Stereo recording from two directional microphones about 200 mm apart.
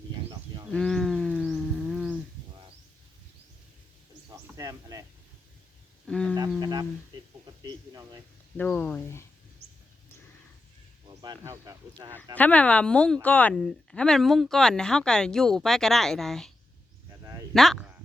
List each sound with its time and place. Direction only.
0.3 s livestock: 25° right (ahead or behind)
0.7 s a sound: 5° left (ahead or behind)
4.3 s a sound: 15° right (ahead or behind)
6.1 s insect: 5° left (ahead or behind)
6.6 s speech: 20° right (ahead or behind)
8.5 s speech: 5° left (ahead or behind)
9.6 s wild animals: 90° right
11.2 s speech: 20° right (ahead or behind)
12.3 s speech: 5° left (ahead or behind)
17.5 s speech: centre (ahead or behind)